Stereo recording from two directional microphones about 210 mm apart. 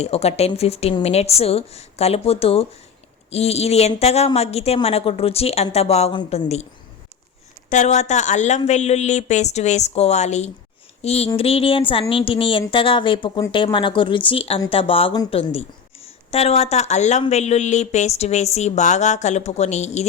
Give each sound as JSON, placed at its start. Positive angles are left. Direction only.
{"t": 0.0, "sound": "a woman's voice", "side_deg": 30}
{"t": 7.7, "sound": "speech", "side_deg": 35}
{"t": 11.0, "sound": "a sound", "side_deg": 30}
{"t": 11.3, "sound": "a woman's voice", "side_deg": 30}